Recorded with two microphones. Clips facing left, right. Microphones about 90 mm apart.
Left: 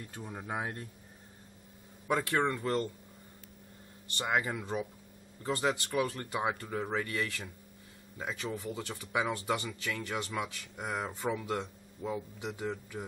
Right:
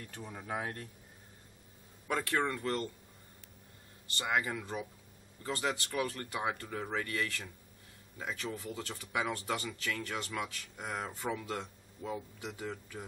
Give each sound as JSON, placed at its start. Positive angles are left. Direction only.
{"t": 0.1, "sound": "speech", "side_deg": 15}
{"t": 0.4, "sound": "speech", "side_deg": 25}
{"t": 2.0, "sound": "speech", "side_deg": 20}
{"t": 4.2, "sound": "speech", "side_deg": 25}